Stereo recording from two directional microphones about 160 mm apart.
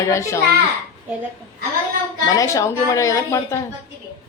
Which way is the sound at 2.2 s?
20° left (ahead or behind).